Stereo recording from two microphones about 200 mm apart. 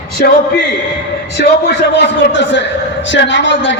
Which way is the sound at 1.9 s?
65° left (ahead or behind).